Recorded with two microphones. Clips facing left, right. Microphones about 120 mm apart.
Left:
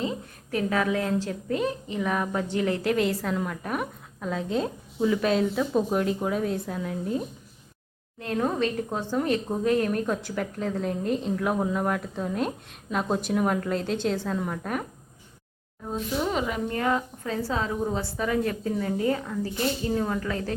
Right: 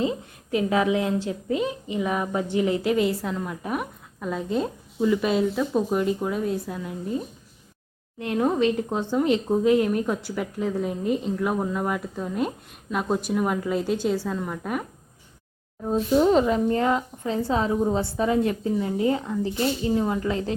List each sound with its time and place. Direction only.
0.5 s a woman's voice: 20° right (ahead or behind); by 7.2 s centre (ahead or behind)
8.4 s a woman's voice: 15° right (ahead or behind)
15.9 s a woman's voice: 30° right (ahead or behind)